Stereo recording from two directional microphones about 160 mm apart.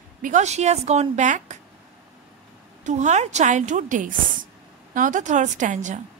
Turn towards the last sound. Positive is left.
turn(degrees=-50)  # may be behind; listen again after turning